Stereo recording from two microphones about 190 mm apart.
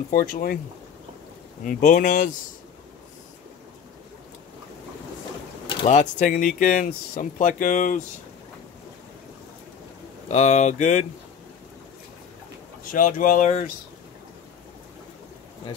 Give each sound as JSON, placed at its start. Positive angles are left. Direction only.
{"t": 0.1, "sound": "speech", "side_deg": 45}
{"t": 1.6, "sound": "speech", "side_deg": 40}
{"t": 5.9, "sound": "speech", "side_deg": 40}
{"t": 10.2, "sound": "speech", "side_deg": 35}
{"t": 12.9, "sound": "speech", "side_deg": 45}